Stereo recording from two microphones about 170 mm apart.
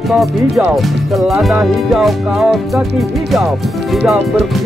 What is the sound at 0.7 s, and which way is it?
Speech, centre (ahead or behind).